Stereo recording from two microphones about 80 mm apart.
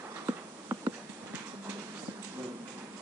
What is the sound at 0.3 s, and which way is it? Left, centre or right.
Insect, right.